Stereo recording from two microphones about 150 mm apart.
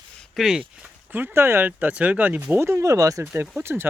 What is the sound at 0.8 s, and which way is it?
Speech, 10° right (ahead or behind).